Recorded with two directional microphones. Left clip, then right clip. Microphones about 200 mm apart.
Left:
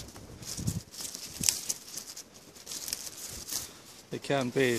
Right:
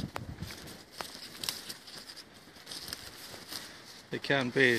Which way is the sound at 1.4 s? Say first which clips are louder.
Left 7 dB; 40° left (ahead or behind).